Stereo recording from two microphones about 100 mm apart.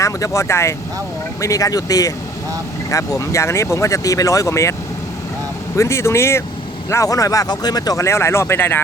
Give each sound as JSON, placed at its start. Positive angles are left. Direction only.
{"t": 0.0, "sound": "speech", "side_deg": 30}
{"t": 5.7, "sound": "speech", "side_deg": 30}
{"t": 8.0, "sound": "speech", "side_deg": 25}